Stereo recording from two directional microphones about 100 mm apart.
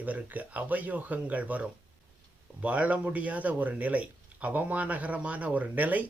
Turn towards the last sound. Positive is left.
turn(degrees=-15)  # may be behind; listen again after turning